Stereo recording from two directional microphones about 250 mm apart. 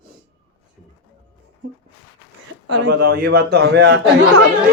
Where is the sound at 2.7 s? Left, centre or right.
Right.